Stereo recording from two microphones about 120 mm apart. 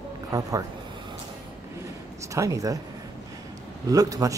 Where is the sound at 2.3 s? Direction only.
25° right (ahead or behind).